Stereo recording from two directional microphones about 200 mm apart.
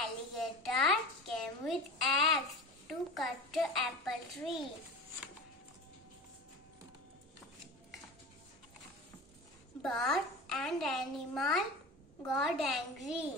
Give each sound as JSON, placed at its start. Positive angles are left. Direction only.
{"t": 0.0, "sound": "a sound", "side_deg": 0}
{"t": 2.9, "sound": "a child's voice", "side_deg": 0}
{"t": 9.8, "sound": "a child's voice", "side_deg": 0}